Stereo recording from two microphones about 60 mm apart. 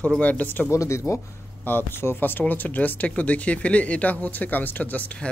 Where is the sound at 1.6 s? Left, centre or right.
Left.